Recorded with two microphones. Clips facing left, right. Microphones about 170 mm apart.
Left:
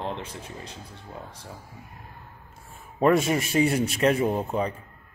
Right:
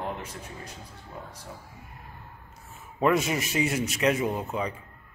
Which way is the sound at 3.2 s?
30° left (ahead or behind).